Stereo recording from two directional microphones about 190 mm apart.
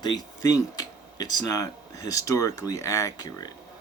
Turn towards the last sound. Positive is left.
turn(degrees=20)  # may be behind; listen again after turning